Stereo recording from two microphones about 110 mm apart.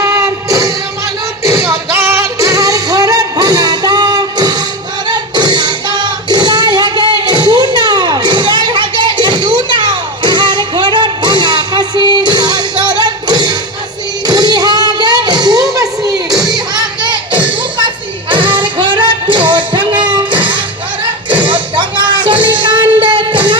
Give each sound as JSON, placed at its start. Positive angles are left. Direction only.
{"t": 0.0, "sound": "music", "side_deg": -30}
{"t": 5.0, "sound": "singing", "side_deg": -40}
{"t": 14.3, "sound": "music", "side_deg": -35}
{"t": 16.5, "sound": "thump", "side_deg": -35}
{"t": 18.3, "sound": "music", "side_deg": -50}
{"t": 21.4, "sound": "a sound", "side_deg": -50}
{"t": 22.4, "sound": "music", "side_deg": -45}